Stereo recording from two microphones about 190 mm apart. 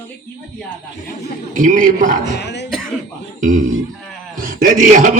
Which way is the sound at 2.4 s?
65° left (ahead or behind).